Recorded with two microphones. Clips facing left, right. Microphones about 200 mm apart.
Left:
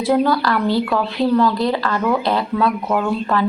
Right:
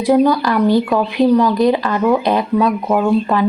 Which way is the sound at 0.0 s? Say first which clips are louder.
Right 4 dB; 15° right (ahead or behind).